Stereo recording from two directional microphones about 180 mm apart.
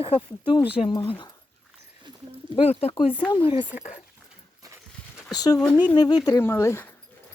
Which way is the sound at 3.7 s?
45° left (ahead or behind).